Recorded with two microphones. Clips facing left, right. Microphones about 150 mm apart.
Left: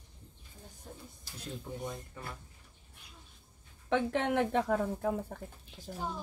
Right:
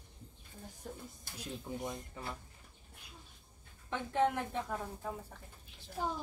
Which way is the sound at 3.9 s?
85° left.